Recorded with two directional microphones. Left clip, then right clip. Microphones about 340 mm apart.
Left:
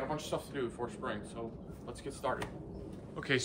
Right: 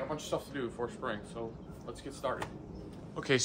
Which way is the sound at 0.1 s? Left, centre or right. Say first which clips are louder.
Right 1 dB; centre.